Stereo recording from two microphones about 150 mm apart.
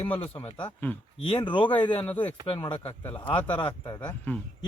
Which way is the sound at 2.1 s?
10° left (ahead or behind).